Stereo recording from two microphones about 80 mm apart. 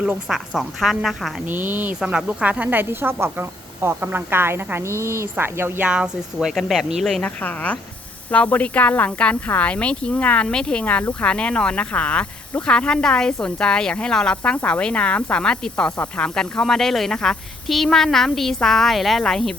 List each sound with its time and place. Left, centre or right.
0.3 s speech: centre
1.5 s speech: right
2.0 s speech: centre; by 5.8 s right
5.8 s speech: centre
6.5 s speech: centre
7.2 s speech: centre